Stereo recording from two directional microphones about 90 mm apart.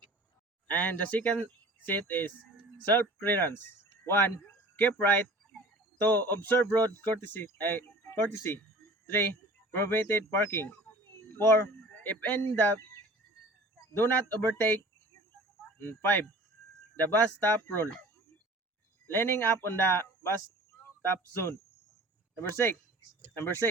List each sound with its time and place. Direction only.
0.7 s speech: 20° left (ahead or behind)
9.7 s speech: 25° left (ahead or behind)
10.7 s a sound: 20° left (ahead or behind)
12.0 s speech: 20° left (ahead or behind)
13.9 s speech: 25° left (ahead or behind)
15.8 s speech: 25° left (ahead or behind)
19.0 s speech: 25° left (ahead or behind)